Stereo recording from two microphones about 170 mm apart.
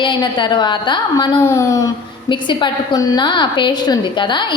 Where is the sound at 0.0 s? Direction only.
25° left (ahead or behind).